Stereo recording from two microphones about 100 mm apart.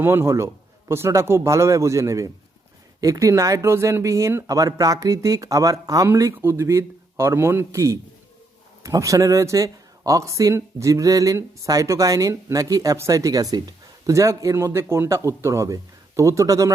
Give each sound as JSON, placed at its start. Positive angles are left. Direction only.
{"t": 0.0, "sound": "a man's voice", "side_deg": -25}